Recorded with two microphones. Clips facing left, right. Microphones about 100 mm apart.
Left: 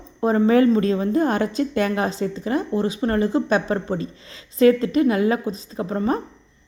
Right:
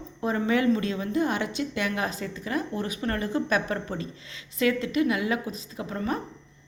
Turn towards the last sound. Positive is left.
turn(degrees=35)  # may be behind; listen again after turning